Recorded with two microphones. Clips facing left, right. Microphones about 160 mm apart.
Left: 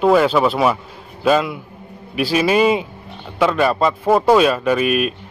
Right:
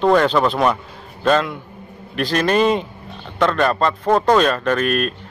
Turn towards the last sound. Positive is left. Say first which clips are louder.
# left 2 dB
turn(degrees=10)  # may be behind; listen again after turning